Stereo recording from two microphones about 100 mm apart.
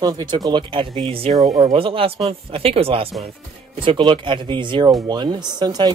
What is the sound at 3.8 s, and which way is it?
Speech, 60° right (ahead or behind).